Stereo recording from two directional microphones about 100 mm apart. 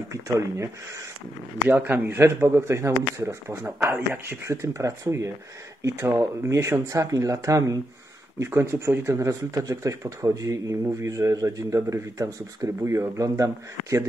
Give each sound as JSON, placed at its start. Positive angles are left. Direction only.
{"t": 0.1, "sound": "speech", "side_deg": -30}
{"t": 1.7, "sound": "speech", "side_deg": -20}